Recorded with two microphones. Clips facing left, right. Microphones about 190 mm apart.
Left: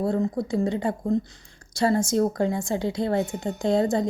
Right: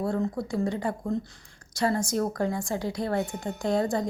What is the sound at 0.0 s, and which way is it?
Speech, 20° left (ahead or behind).